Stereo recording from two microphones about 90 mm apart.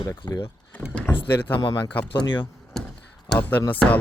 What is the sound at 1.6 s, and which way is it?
Speech, 45° left (ahead or behind).